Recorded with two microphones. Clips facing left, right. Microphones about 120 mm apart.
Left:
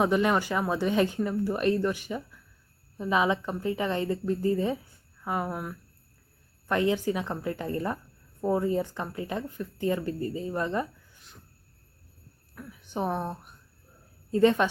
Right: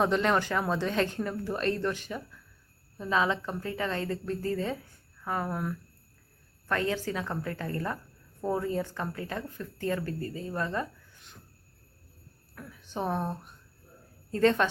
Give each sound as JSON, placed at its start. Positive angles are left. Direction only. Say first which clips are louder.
{"t": 0.0, "sound": "speech", "louder": "left 2 dB", "side_deg": 10}
{"t": 6.7, "sound": "speech", "louder": "left 4 dB", "side_deg": 15}
{"t": 12.8, "sound": "speech", "louder": "left 1 dB", "side_deg": 15}
{"t": 14.3, "sound": "speech", "louder": "left 2 dB", "side_deg": 15}